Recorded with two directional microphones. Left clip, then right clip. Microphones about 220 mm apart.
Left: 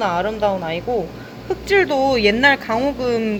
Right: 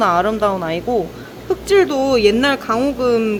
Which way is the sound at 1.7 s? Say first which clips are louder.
Right 2 dB; 15° right (ahead or behind).